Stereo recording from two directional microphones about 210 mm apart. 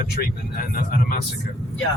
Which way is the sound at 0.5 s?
45° left (ahead or behind).